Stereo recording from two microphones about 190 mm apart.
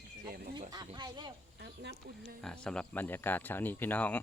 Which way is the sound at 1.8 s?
60° right (ahead or behind).